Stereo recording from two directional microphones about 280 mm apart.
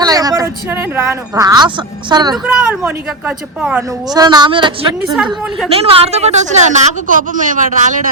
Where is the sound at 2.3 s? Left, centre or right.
Centre; by 8.0 s right.